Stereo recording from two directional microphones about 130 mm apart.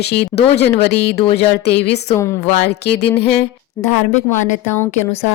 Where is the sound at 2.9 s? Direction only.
50° left (ahead or behind).